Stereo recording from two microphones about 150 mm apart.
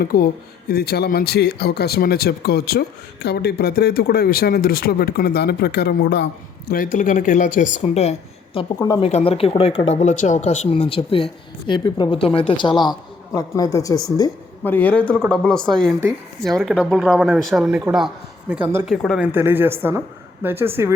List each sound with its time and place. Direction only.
0.0 s speech: 80° left
0.7 s speech: 90° left
6.7 s speech: 65° left (ahead or behind)
10.7 s a woman's voice: 40° left (ahead or behind)
14.6 s a man's voice: 10° left (ahead or behind); by 18.9 s 15° right (ahead or behind)
18.9 s speech: centre (ahead or behind)
19.3 s speech: 15° right (ahead or behind)